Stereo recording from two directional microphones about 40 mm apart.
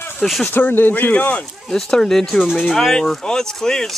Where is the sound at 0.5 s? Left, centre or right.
Left.